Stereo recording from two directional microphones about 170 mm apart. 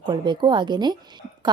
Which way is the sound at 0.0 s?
25° right (ahead or behind).